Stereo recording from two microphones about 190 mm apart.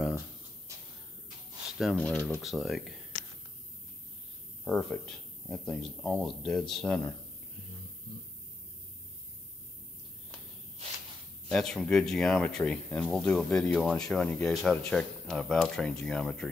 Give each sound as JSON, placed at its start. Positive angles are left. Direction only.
{"t": 0.7, "sound": "a sound", "side_deg": -15}
{"t": 1.8, "sound": "speech", "side_deg": 5}
{"t": 4.6, "sound": "speech", "side_deg": 0}
{"t": 11.4, "sound": "speech", "side_deg": 5}